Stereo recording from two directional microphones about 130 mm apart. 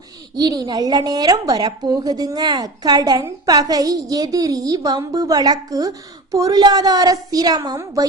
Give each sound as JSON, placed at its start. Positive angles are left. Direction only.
{"t": 0.3, "sound": "a woman's voice", "side_deg": -30}